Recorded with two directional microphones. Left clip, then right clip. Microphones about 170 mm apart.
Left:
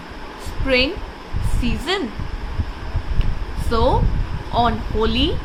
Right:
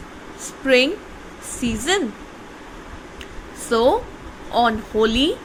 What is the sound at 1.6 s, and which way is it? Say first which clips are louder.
Speech: right 2 dB; 30° right (ahead or behind).